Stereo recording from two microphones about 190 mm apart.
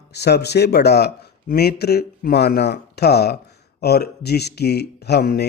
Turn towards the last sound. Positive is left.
turn(degrees=60)  # may be behind; listen again after turning